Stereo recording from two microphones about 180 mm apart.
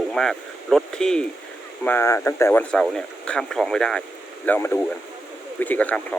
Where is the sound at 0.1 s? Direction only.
Centre (ahead or behind).